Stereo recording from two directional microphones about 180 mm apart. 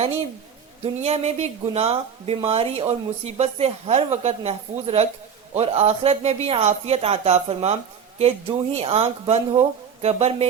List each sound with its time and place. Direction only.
0.9 s speech: 35° right (ahead or behind)